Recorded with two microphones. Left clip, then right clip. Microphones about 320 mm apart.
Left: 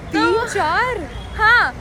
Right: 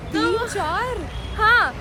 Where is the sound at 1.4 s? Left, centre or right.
Centre.